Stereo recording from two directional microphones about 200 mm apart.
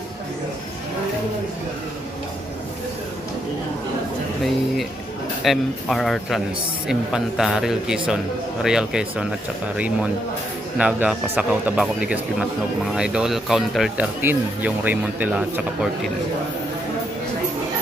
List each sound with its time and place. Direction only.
5.4 s speech: centre (ahead or behind)
10.8 s speech: 5° right (ahead or behind)